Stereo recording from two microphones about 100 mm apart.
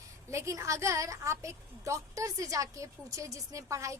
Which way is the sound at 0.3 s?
30° right (ahead or behind).